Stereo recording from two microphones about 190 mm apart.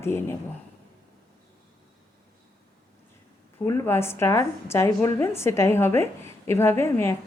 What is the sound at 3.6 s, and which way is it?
A woman's voice, 15° left (ahead or behind).